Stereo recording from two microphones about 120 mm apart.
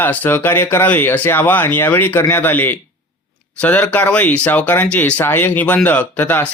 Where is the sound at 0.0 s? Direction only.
15° left (ahead or behind).